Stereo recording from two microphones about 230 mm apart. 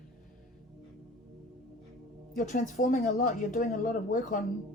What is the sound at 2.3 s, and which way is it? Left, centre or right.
Speech, left.